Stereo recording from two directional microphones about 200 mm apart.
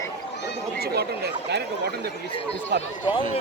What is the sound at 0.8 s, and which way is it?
Speech, 55° right (ahead or behind).